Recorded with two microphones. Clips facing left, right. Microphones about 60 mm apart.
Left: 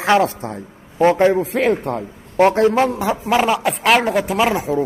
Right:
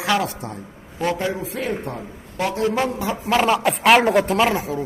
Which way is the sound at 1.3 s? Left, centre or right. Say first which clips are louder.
Left 9 dB; left.